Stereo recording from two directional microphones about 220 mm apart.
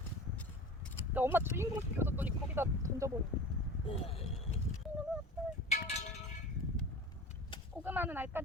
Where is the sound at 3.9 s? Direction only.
25° left (ahead or behind).